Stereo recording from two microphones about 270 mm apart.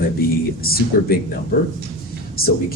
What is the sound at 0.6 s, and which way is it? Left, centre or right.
Speech, left.